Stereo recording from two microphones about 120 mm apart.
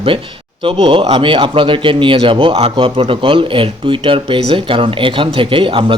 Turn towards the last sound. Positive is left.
turn(degrees=-45)  # may be behind; listen again after turning